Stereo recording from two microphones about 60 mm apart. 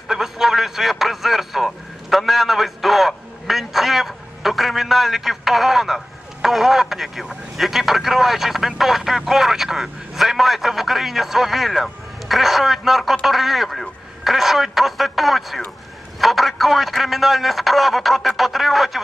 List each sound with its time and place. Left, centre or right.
0.1 s a man's voice: centre